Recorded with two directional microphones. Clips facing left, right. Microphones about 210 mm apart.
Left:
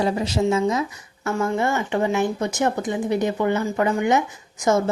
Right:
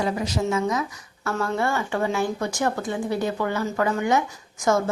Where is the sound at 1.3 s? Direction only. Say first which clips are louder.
Left 3 dB; 15° left (ahead or behind).